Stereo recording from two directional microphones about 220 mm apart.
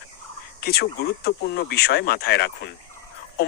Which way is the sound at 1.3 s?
45° left (ahead or behind).